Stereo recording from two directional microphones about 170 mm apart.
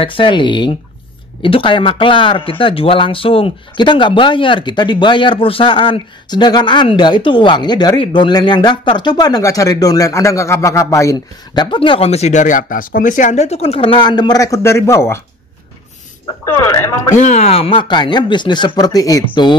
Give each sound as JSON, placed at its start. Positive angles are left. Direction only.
{"t": 0.0, "sound": "speech", "side_deg": 30}
{"t": 16.4, "sound": "speech", "side_deg": 15}
{"t": 17.1, "sound": "speech", "side_deg": 45}